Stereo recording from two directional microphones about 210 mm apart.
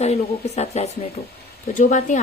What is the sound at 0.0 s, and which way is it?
A woman's voice, 30° left (ahead or behind).